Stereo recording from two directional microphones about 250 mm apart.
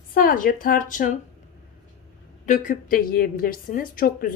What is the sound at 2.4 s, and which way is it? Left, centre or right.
Speech, left.